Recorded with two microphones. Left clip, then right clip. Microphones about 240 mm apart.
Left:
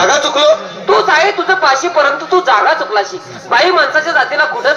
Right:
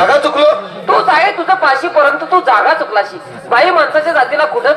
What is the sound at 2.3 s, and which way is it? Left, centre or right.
A woman's voice, right.